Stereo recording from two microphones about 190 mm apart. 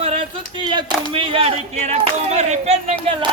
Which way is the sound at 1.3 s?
30° right (ahead or behind).